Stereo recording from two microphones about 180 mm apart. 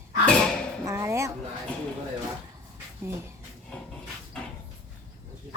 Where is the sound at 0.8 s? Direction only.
15° right (ahead or behind).